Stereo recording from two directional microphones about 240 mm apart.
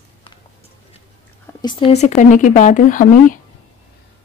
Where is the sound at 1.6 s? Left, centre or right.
Left.